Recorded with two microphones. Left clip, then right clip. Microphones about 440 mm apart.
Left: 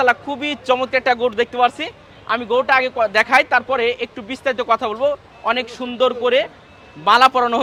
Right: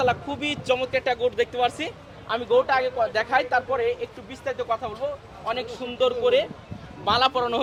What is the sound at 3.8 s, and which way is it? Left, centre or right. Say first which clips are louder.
A man's voice: left 6 dB; left.